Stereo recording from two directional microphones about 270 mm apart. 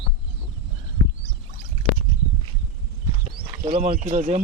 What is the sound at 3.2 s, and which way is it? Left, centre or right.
Speech, right.